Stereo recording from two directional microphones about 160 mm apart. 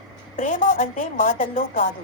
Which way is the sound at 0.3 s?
55° left (ahead or behind).